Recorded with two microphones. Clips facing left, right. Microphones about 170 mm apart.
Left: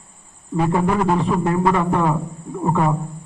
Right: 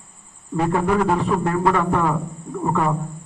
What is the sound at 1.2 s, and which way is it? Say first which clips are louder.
A man's voice: left 1 dB; 15° left (ahead or behind).